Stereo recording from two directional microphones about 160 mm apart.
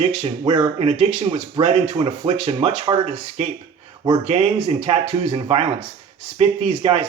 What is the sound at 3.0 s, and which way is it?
Speech, 45° right (ahead or behind).